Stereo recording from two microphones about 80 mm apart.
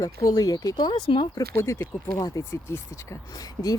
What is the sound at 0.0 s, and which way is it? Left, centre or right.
Speech, left.